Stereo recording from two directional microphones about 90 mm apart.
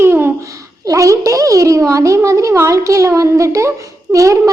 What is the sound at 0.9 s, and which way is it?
A woman's voice, 40° right (ahead or behind).